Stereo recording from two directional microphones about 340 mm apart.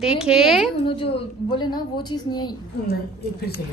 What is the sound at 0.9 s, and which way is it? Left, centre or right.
A woman's voice, centre.